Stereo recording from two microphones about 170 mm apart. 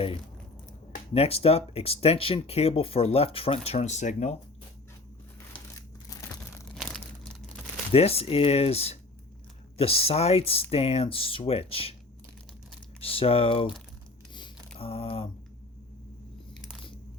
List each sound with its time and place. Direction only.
1.1 s speech: 35° left (ahead or behind)
6.7 s crumpling: 5° left (ahead or behind)
7.9 s speech: 35° left (ahead or behind)
13.0 s speech: 35° left (ahead or behind)
14.8 s speech: 35° left (ahead or behind)